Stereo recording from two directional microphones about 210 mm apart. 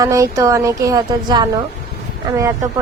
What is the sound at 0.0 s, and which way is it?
Speech, 15° right (ahead or behind).